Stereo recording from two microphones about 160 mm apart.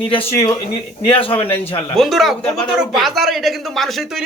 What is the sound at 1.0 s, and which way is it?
Speech, 35° left (ahead or behind).